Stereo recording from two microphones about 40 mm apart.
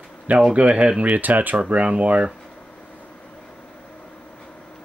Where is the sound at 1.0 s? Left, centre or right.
Right.